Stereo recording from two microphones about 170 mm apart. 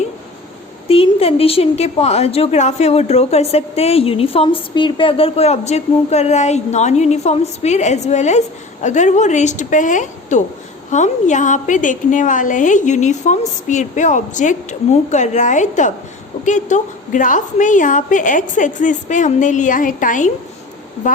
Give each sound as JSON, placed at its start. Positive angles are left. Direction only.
{"t": 0.9, "sound": "a woman's voice", "side_deg": 35}